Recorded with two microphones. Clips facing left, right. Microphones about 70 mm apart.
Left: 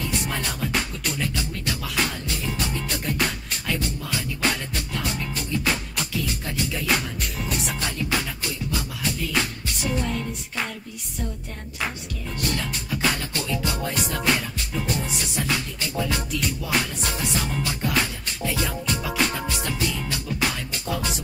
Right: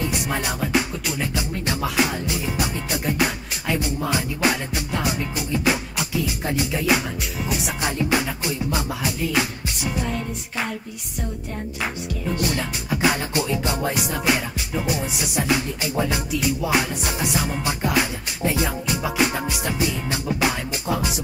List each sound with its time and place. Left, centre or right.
0.1 s music: centre
7.8 s music: centre
12.4 s music: centre
13.9 s music: centre